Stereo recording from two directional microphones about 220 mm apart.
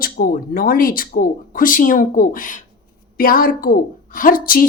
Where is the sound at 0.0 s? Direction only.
40° left (ahead or behind).